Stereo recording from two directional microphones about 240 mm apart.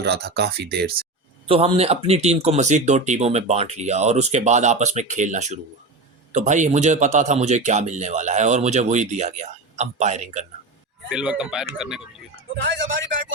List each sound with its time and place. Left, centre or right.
0.0 s speech: right
1.5 s a man's voice: right
11.1 s speech: centre
12.6 s speech: right